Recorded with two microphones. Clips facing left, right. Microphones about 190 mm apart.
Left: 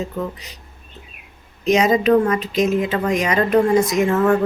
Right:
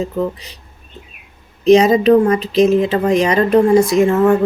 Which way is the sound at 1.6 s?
30° right (ahead or behind).